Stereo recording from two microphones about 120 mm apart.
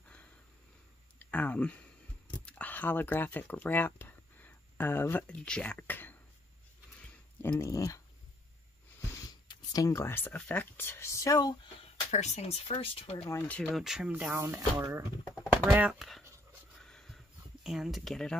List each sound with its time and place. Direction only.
1.2 s a sound: 10° left (ahead or behind)
2.3 s speech: 10° left (ahead or behind)
7.0 s a sound: 15° left (ahead or behind)
7.7 s speech: 25° left (ahead or behind)
9.2 s speech: 30° left (ahead or behind)
12.1 s speech: 65° left (ahead or behind)
13.5 s speech: 5° left (ahead or behind)
13.8 s speech: 5° right (ahead or behind)
14.3 s speech: 25° right (ahead or behind)
15.6 s speech: 10° right (ahead or behind)
16.8 s a sound: 5° left (ahead or behind)
17.6 s speech: 5° right (ahead or behind)